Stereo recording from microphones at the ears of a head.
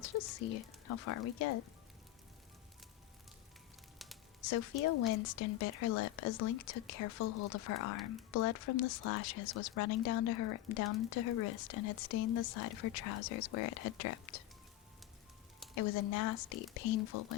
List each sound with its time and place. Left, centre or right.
0.0 s speech: left
4.4 s speech: left
15.7 s speech: left